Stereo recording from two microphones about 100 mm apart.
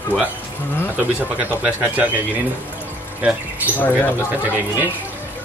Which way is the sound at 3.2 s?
10° right (ahead or behind).